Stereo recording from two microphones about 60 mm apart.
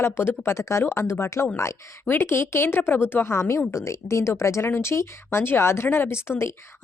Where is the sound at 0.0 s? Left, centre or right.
Left.